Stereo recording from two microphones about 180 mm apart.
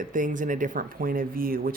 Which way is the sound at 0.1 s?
45° right (ahead or behind).